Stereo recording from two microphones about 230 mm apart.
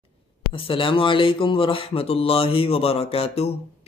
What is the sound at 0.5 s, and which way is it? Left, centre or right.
Speech, left.